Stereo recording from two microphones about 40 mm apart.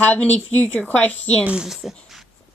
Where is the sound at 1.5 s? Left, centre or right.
Centre.